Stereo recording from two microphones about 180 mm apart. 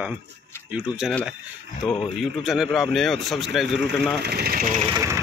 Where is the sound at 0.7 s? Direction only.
5° right (ahead or behind).